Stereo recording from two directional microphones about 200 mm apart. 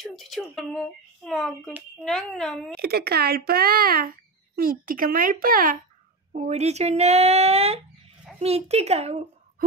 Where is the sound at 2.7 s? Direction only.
50° right (ahead or behind).